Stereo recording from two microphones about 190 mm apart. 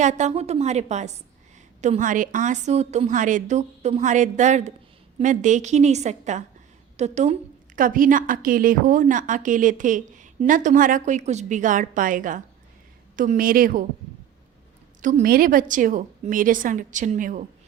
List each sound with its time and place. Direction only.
0.0 s a woman's voice: 40° right (ahead or behind)
15.0 s a woman's voice: 45° right (ahead or behind)